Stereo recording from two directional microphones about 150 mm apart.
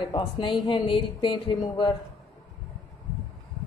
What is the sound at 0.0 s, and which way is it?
Speech, 30° left (ahead or behind).